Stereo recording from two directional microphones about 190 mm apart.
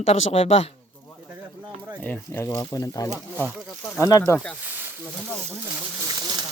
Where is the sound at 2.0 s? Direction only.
10° left (ahead or behind).